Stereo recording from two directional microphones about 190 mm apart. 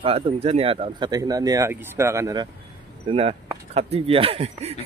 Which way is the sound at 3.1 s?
30° right (ahead or behind).